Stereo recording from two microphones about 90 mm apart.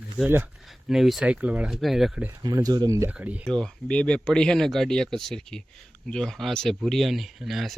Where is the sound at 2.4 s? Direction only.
45° right (ahead or behind).